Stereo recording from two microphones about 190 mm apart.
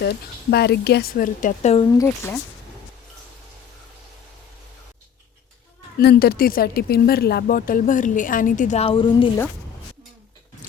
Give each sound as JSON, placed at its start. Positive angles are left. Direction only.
{"t": 0.0, "sound": "speech", "side_deg": 60}
{"t": 1.8, "sound": "speech", "side_deg": 15}
{"t": 6.0, "sound": "speech", "side_deg": 55}